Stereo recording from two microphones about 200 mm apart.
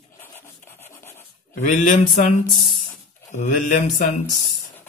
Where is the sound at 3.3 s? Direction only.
35° left (ahead or behind).